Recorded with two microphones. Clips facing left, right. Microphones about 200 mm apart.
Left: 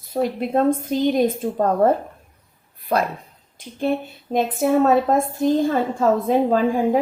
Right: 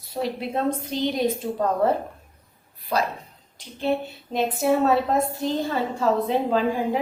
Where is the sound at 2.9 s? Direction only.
55° left (ahead or behind).